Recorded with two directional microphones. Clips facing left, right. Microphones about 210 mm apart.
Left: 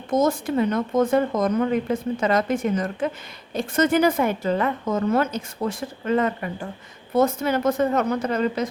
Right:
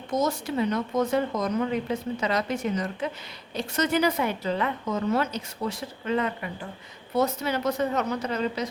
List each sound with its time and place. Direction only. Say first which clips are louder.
0.1 s a woman's voice: left 6 dB; 50° left (ahead or behind)